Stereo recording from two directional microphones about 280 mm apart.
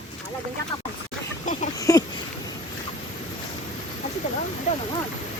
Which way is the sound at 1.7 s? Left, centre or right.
Centre.